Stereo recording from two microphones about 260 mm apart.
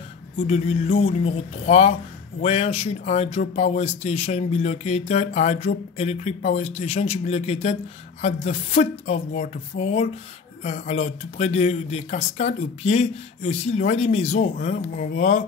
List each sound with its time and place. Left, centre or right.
0.4 s speech: left